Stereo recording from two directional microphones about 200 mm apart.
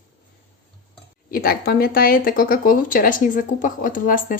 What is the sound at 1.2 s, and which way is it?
Speech, 45° left (ahead or behind).